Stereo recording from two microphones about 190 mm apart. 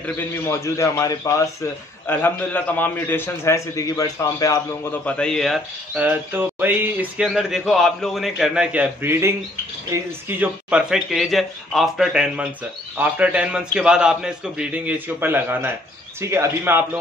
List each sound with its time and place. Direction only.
0.0 s a man's voice: 15° left (ahead or behind)
5.0 s a man's voice: 5° left (ahead or behind); by 16.8 s 15° right (ahead or behind)